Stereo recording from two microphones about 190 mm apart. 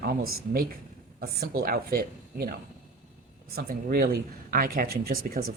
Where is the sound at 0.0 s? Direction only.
55° right (ahead or behind).